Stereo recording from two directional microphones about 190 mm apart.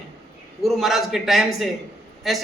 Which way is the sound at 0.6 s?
Centre (ahead or behind).